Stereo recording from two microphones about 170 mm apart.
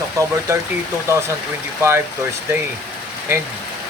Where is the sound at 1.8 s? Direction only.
15° right (ahead or behind).